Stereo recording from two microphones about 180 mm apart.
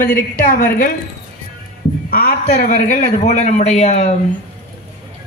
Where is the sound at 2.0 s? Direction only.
55° left (ahead or behind).